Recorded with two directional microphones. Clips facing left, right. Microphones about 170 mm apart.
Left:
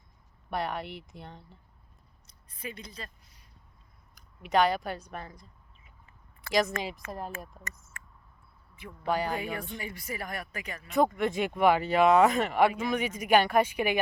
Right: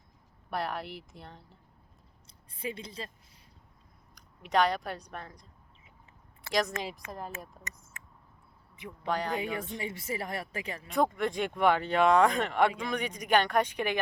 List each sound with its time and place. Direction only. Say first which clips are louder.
0.5 s speech: left 1 dB; centre (ahead or behind)
2.2 s a sound: right 4 dB; 30° right (ahead or behind)
4.1 s speech: left 2 dB; centre (ahead or behind)
6.5 s speech: left 3 dB; centre (ahead or behind)
7.7 s speech: left 2 dB; 20° right (ahead or behind)
9.0 s speech: left 2 dB; 5° left (ahead or behind)
9.4 s speech: right 1 dB; 20° right (ahead or behind)
10.8 s speech: left 3 dB; centre (ahead or behind)